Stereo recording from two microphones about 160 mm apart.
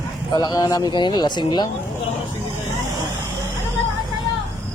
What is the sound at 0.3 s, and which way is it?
Speech, 25° left (ahead or behind).